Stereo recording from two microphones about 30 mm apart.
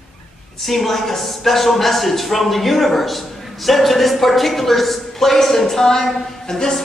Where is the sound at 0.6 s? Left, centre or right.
Centre.